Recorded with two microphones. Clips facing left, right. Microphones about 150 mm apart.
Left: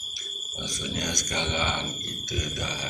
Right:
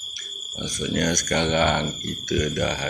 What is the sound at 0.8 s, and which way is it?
Speech, 60° right (ahead or behind).